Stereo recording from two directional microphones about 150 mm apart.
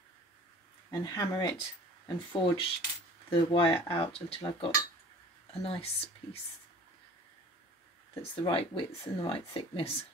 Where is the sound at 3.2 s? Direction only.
35° left (ahead or behind).